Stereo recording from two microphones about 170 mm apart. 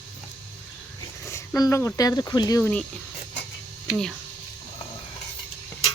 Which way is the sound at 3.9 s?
5° left (ahead or behind).